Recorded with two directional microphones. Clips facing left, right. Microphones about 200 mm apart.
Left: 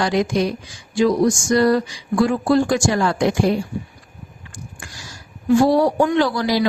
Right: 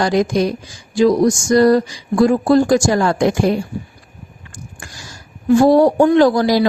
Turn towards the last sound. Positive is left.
turn(degrees=-45)  # may be behind; listen again after turning